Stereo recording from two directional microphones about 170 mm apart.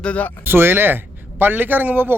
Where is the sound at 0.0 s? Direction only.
10° left (ahead or behind).